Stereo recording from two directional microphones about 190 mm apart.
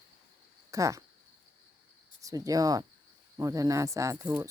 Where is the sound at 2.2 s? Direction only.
20° right (ahead or behind).